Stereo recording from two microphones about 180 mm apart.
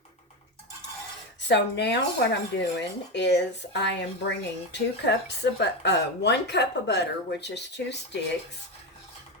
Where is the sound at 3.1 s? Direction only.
70° left (ahead or behind).